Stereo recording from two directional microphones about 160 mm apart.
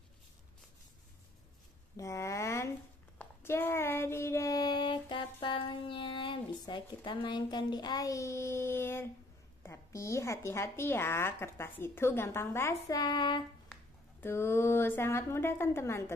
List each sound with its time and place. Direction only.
2.0 s a sound: 20° left (ahead or behind)
3.2 s child singing: 15° left (ahead or behind)
9.6 s a woman's voice: 15° left (ahead or behind)
14.2 s a woman's voice: 15° left (ahead or behind)